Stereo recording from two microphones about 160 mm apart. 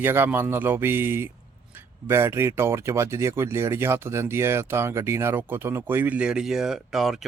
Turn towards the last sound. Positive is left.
turn(degrees=0)  # may be behind; listen again after turning